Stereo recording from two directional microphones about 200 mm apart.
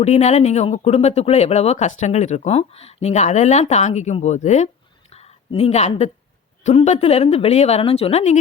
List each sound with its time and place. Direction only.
0.0 s speech: 35° left (ahead or behind)
5.1 s a sound: 30° left (ahead or behind)
6.7 s speech: 35° left (ahead or behind)